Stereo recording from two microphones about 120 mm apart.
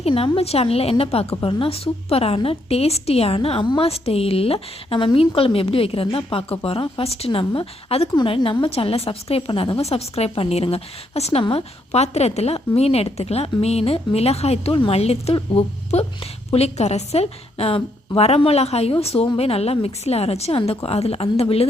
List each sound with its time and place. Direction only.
0.0 s a woman's voice: 55° left (ahead or behind)
8.1 s a woman's voice: 40° left (ahead or behind); by 21.7 s 55° left (ahead or behind)